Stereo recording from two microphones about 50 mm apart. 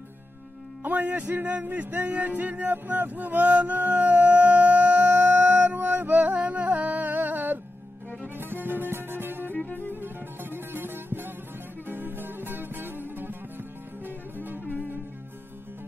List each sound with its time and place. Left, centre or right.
0.8 s music: right